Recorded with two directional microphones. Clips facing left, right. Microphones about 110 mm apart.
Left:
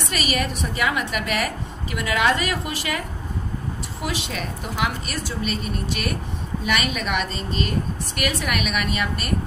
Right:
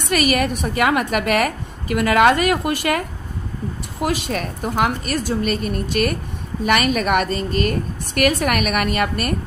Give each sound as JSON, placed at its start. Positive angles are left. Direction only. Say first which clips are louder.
{"t": 0.1, "sound": "a woman's voice", "louder": "right 8 dB", "side_deg": -55}
{"t": 4.0, "sound": "a woman's voice", "louder": "right 7 dB", "side_deg": -50}